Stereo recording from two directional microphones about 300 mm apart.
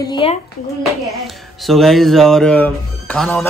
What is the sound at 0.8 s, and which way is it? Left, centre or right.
Speech, centre.